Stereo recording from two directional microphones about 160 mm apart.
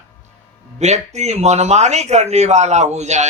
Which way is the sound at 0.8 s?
45° right (ahead or behind).